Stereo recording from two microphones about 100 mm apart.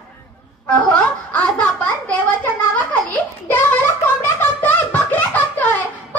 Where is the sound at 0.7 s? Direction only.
10° left (ahead or behind).